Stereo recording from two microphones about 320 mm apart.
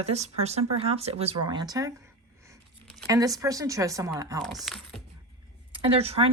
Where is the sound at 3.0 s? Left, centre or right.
Centre.